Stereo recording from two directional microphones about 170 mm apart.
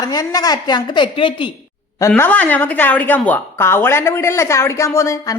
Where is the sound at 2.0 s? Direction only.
15° left (ahead or behind).